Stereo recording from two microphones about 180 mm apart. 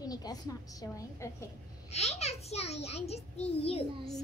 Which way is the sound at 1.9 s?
35° left (ahead or behind).